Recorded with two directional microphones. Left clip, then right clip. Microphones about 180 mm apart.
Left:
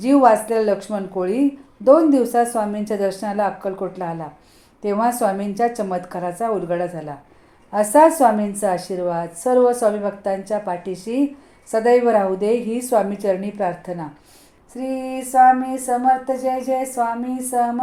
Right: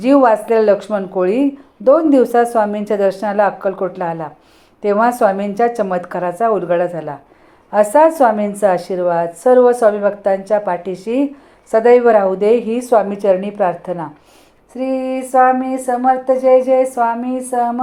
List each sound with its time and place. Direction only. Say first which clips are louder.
0.0 s a woman's voice: right 3 dB; 20° right (ahead or behind)